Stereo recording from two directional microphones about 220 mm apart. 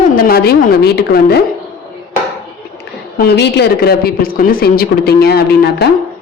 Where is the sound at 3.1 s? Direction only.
50° left (ahead or behind).